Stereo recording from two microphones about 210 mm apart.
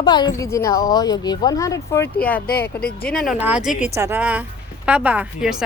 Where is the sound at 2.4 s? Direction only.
45° left (ahead or behind).